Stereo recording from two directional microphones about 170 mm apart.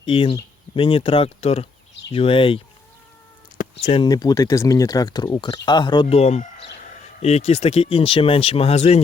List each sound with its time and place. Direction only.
0.0 s speech: 30° left (ahead or behind)
3.6 s a sound: 50° left (ahead or behind)
3.9 s speech: 25° left (ahead or behind)